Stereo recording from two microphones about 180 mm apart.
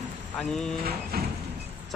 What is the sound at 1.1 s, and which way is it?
Vehicle, 55° right (ahead or behind).